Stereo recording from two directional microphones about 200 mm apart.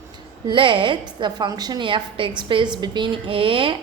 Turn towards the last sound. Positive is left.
turn(degrees=-25)  # may be behind; listen again after turning